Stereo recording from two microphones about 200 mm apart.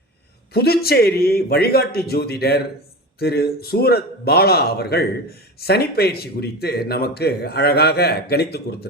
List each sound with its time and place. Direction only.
0.5 s a man's voice: 50° left (ahead or behind)